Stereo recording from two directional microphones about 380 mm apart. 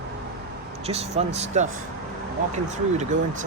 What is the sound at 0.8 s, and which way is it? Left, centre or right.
Speech, centre.